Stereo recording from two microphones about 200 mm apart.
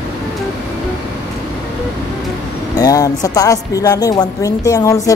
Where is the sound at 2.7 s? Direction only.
20° left (ahead or behind).